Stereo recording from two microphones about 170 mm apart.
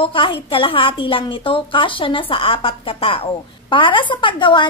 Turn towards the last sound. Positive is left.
turn(degrees=30)  # may be behind; listen again after turning